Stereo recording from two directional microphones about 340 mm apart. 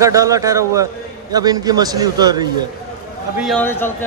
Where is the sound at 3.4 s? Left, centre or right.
Centre.